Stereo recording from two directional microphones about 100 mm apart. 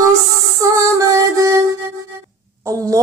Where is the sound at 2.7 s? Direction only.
35° right (ahead or behind).